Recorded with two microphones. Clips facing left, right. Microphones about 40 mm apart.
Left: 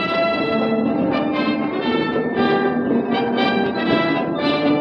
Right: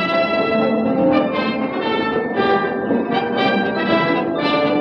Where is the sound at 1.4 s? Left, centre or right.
Right.